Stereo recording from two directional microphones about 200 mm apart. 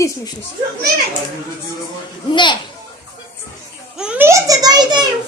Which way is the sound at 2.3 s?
25° left (ahead or behind).